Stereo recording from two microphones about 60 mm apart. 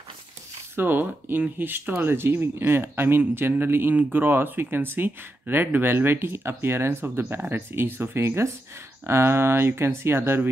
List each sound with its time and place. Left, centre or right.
0.7 s speech: right